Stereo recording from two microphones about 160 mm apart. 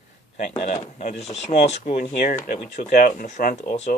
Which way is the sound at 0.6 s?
50° left (ahead or behind).